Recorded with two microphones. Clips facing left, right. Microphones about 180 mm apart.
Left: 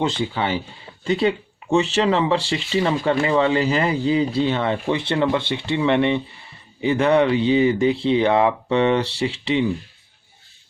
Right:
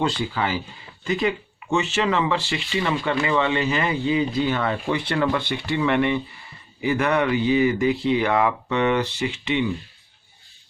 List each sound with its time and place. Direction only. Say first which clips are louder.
0.0 s speech: left 2 dB; 25° left (ahead or behind)